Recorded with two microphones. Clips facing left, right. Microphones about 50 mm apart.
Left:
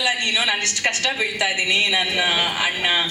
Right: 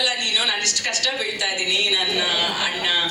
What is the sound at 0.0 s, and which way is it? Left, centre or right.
Speech, left.